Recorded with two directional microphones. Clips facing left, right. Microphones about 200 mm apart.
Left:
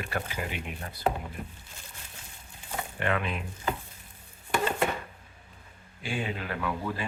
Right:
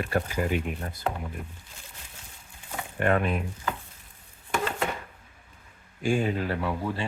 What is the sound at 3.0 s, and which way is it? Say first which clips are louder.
Chopping: right 6 dB; 45° right (ahead or behind).